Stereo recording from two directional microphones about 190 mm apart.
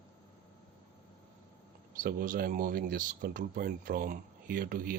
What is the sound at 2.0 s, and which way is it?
Speech, 50° right (ahead or behind).